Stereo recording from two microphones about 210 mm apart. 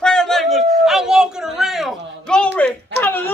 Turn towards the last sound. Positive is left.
turn(degrees=10)  # may be behind; listen again after turning